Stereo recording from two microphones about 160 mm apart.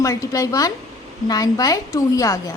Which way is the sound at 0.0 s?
20° left (ahead or behind).